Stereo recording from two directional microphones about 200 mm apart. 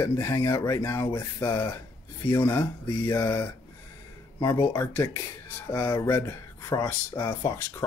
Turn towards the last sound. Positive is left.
turn(degrees=15)  # may be behind; listen again after turning